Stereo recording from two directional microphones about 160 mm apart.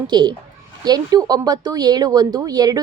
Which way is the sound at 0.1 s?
25° right (ahead or behind).